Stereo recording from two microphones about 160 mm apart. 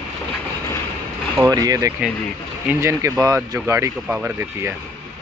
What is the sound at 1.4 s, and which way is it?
Speech, 25° right (ahead or behind).